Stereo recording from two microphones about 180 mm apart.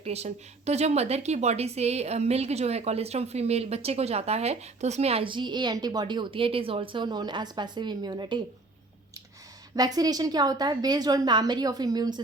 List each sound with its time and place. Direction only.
0.0 s speech: 35° right (ahead or behind)
9.7 s a woman's voice: 20° right (ahead or behind)